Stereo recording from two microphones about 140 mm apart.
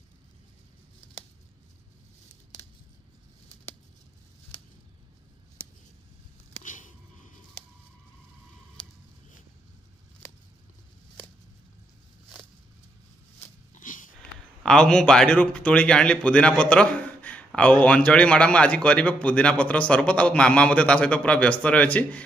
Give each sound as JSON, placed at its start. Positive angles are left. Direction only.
{"t": 6.6, "sound": "a sound", "side_deg": 65}
{"t": 13.7, "sound": "dog", "side_deg": 70}
{"t": 14.6, "sound": "a man's voice", "side_deg": 5}